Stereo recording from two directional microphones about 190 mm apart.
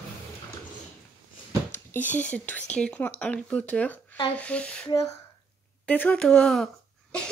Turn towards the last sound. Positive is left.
turn(degrees=5)  # may be behind; listen again after turning